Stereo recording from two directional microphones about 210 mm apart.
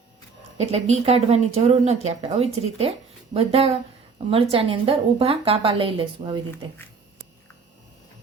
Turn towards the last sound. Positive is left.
turn(degrees=-25)  # may be behind; listen again after turning